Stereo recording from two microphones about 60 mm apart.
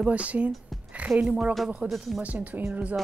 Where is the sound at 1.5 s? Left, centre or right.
Centre.